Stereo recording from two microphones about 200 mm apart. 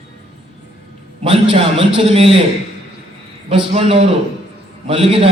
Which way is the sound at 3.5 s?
30° right (ahead or behind).